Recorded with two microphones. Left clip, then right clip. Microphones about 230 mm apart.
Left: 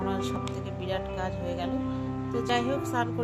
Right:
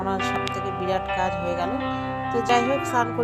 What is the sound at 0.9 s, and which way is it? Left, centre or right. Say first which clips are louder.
Speech: right 7 dB; right.